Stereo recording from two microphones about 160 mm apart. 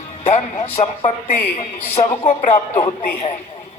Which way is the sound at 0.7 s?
40° left (ahead or behind).